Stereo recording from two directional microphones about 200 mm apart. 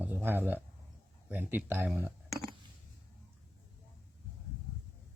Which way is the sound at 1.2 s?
10° right (ahead or behind).